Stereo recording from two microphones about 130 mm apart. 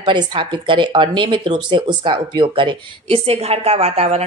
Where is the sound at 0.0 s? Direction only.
35° right (ahead or behind).